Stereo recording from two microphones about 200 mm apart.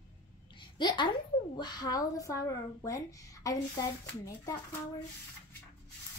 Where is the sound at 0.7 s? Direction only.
25° left (ahead or behind).